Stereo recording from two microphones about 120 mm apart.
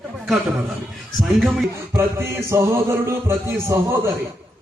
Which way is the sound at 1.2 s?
Centre (ahead or behind).